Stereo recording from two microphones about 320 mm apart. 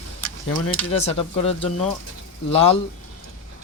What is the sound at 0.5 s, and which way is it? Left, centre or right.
Speech, centre.